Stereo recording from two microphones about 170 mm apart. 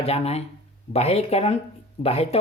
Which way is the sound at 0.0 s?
35° left (ahead or behind).